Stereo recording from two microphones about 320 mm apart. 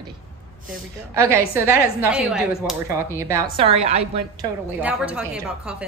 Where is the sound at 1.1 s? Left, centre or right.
Centre.